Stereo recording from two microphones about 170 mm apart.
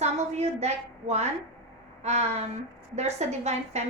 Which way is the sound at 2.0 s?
40° right (ahead or behind).